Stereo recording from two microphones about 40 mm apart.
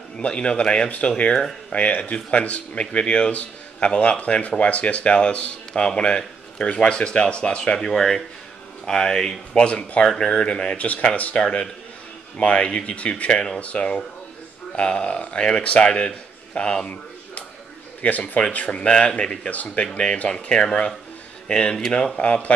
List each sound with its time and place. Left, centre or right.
0.2 s speech: left
7.9 s speech: centre
9.5 s speech: left
12.4 s a man's voice: left
18.0 s speech: left
19.5 s speech: left
19.8 s speech: left